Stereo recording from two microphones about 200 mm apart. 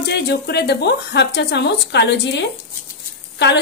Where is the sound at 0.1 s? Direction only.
55° left (ahead or behind).